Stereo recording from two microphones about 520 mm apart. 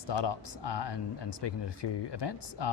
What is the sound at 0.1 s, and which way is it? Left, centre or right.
Speech, left.